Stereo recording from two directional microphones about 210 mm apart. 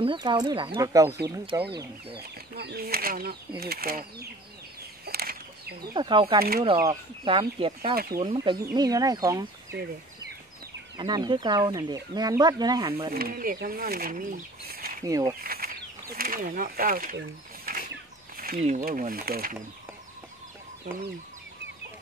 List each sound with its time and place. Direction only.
0.0 s speech: 25° right (ahead or behind)
2.1 s speech: 50° right (ahead or behind)
5.0 s bird flight: 45° right (ahead or behind)
5.9 s speech: 25° right (ahead or behind)
11.0 s speech: 20° right (ahead or behind)
13.1 s speech: 45° right (ahead or behind)
15.0 s speech: 15° right (ahead or behind)
15.4 s speech: 45° right (ahead or behind)
17.7 s a sound: 45° right (ahead or behind)
18.4 s speech: 40° right (ahead or behind)
20.9 s speech: 40° right (ahead or behind)